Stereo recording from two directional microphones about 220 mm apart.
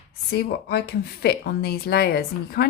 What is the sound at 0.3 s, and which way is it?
Speech, 45° left (ahead or behind).